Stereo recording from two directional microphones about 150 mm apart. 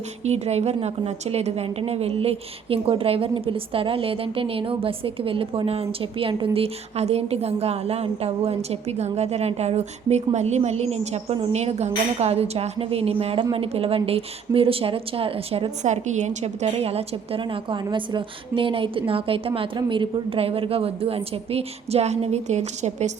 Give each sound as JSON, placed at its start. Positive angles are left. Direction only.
{"t": 0.3, "sound": "a woman's voice", "side_deg": -45}